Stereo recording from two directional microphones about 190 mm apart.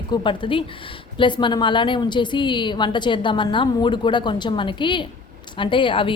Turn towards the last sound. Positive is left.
turn(degrees=25)  # may be behind; listen again after turning